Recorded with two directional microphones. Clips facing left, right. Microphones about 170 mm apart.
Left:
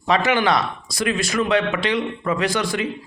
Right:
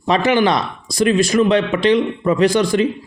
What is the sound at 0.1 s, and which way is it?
Speech, 35° right (ahead or behind).